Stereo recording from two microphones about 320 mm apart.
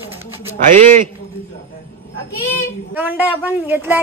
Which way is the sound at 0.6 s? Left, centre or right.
Right.